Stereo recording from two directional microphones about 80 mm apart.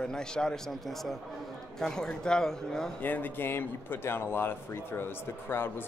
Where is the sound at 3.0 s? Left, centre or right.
Left.